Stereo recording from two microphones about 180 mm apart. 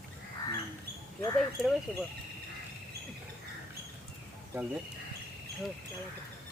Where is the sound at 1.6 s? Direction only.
Centre (ahead or behind).